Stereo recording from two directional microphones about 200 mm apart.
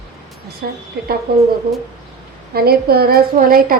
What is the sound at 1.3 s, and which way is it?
Speech, 50° right (ahead or behind).